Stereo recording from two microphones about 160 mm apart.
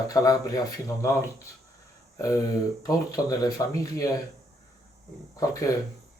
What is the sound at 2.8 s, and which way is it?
Speech, 20° left (ahead or behind).